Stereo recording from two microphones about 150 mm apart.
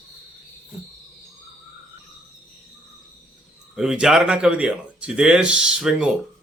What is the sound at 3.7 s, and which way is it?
Speech, 5° right (ahead or behind).